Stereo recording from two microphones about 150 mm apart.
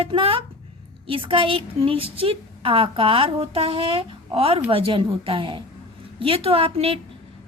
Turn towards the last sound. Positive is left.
turn(degrees=-40)  # may be behind; listen again after turning